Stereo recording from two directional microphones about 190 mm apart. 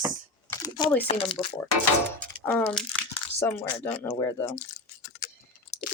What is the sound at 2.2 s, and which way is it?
Speech, 5° left (ahead or behind).